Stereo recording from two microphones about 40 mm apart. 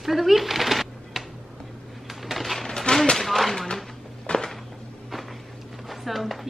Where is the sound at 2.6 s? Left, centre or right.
Centre.